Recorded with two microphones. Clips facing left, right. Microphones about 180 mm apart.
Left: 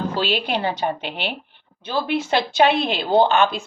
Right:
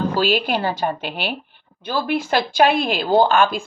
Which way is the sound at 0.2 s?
20° left (ahead or behind).